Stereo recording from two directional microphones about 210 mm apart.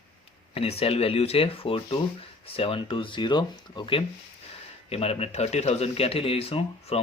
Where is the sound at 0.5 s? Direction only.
25° left (ahead or behind).